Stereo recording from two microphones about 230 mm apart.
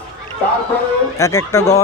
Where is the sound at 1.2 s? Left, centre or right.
Centre.